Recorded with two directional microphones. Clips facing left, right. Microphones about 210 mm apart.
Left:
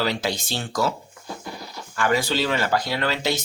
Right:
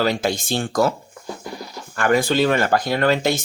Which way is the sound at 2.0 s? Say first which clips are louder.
Right 5 dB; 50° right (ahead or behind).